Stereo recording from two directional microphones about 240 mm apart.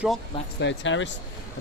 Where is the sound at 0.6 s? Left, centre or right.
Left.